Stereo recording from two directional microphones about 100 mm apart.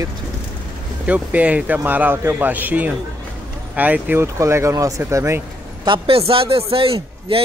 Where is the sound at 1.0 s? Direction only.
15° right (ahead or behind).